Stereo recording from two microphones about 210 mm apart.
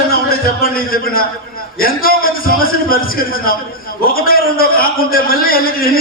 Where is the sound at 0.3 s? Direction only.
45° left (ahead or behind).